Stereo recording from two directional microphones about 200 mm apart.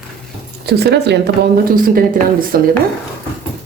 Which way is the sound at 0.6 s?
55° right (ahead or behind).